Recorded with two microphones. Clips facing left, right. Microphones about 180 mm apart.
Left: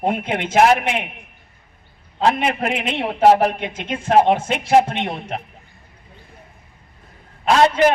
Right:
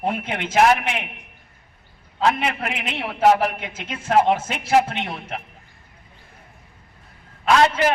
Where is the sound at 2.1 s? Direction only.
25° left (ahead or behind).